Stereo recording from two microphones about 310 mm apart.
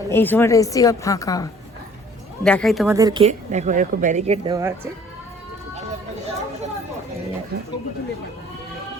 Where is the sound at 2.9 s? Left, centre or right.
Centre.